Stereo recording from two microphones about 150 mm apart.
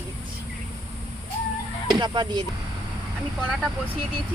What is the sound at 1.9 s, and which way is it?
Speech, 30° right (ahead or behind).